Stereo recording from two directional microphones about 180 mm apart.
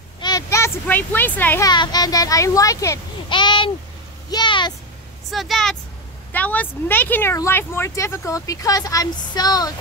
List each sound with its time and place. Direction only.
0.2 s a child's voice: 20° left (ahead or behind)
1.7 s a child's voice: 25° left (ahead or behind)
5.3 s speech: centre (ahead or behind); by 9.7 s 20° left (ahead or behind)